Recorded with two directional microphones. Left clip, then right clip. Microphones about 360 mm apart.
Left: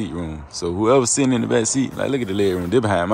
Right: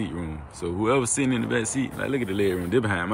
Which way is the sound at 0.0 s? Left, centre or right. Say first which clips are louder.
Left 4 dB; centre.